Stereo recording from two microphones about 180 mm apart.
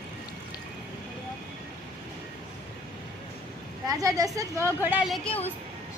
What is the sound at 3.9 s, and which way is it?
A woman's voice, 20° right (ahead or behind).